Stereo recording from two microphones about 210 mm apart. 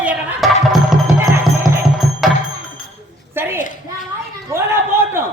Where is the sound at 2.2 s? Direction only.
Centre (ahead or behind).